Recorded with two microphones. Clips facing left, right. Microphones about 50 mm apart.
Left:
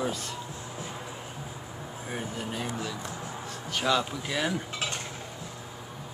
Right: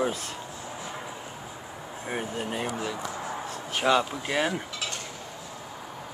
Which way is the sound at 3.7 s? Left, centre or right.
Right.